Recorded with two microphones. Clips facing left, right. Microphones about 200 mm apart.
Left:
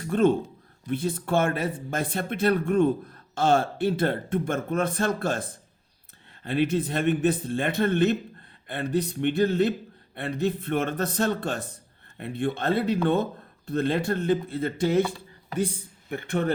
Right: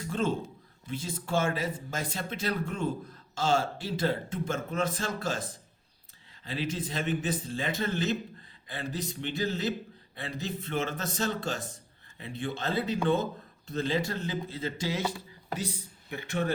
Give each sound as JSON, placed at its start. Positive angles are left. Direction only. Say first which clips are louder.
{"t": 0.0, "sound": "speech", "louder": "left 8 dB", "side_deg": 60}